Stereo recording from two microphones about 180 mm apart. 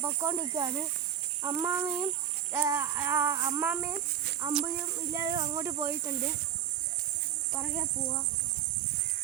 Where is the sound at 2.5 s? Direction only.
15° right (ahead or behind).